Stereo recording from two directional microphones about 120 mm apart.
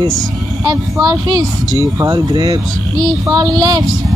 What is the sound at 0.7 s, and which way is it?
Speech, 30° right (ahead or behind).